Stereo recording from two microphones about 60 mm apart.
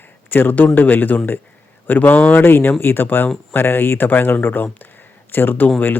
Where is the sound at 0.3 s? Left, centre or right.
Left.